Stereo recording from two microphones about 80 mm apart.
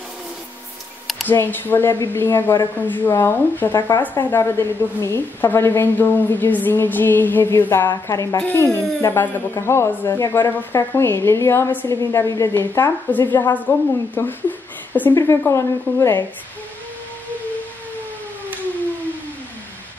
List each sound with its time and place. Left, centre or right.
1.2 s a woman's voice: left
8.1 s speech: left
8.4 s a woman's voice: left
11.9 s speech: left
12.5 s a woman's voice: left
15.1 s speech: left